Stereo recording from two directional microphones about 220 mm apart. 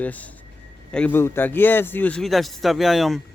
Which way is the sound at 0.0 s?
5° left (ahead or behind).